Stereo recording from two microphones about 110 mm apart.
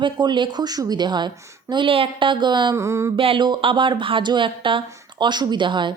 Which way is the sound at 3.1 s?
55° right (ahead or behind).